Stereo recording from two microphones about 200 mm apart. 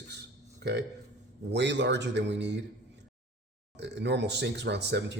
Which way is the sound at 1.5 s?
60° right (ahead or behind).